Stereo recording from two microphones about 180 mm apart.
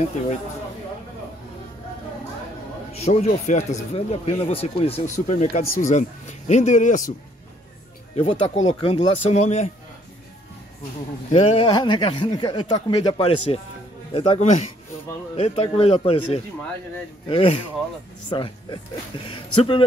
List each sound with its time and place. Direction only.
2.9 s speech: 35° left (ahead or behind)
8.2 s speech: 30° left (ahead or behind)
11.3 s speech: 30° left (ahead or behind)
17.3 s speech: 30° left (ahead or behind)